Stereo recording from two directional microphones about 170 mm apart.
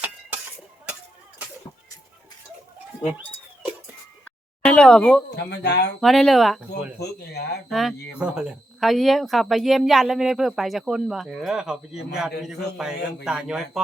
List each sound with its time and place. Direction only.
4.6 s speech: 5° left (ahead or behind)
5.3 s speech: 80° left
6.0 s speech: centre (ahead or behind)
7.0 s speech: 70° left (ahead or behind)
7.7 s speech: centre (ahead or behind)